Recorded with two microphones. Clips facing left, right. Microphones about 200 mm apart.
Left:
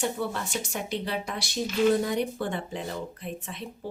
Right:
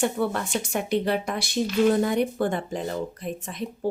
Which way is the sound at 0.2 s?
60° right (ahead or behind).